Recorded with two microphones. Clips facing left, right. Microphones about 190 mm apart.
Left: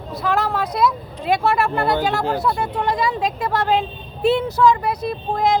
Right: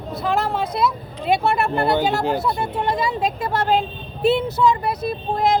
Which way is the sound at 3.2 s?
Centre (ahead or behind).